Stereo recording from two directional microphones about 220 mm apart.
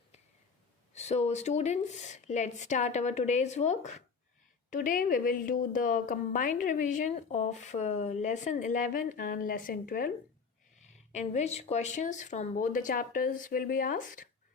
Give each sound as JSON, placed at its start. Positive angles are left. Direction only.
{"t": 0.9, "sound": "a woman's voice", "side_deg": 30}